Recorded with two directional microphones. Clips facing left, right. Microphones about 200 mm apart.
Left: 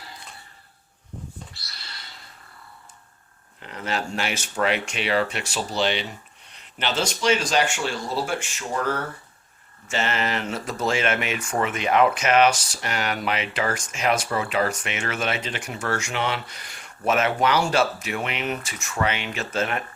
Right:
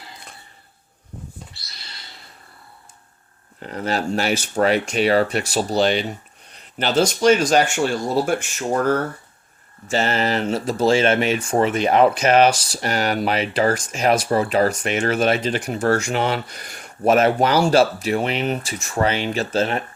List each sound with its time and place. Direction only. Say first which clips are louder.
3.6 s speech: right 5 dB; 40° right (ahead or behind)
9.9 s speech: right 5 dB; 35° right (ahead or behind)